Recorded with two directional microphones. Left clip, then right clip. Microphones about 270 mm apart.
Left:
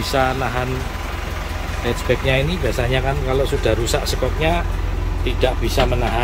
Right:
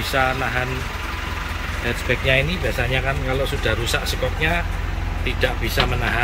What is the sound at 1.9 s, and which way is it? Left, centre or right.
Speech, centre.